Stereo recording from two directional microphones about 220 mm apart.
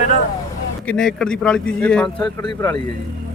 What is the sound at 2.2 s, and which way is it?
Speech, 20° left (ahead or behind).